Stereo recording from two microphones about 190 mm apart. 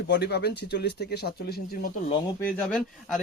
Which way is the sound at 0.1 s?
60° left (ahead or behind).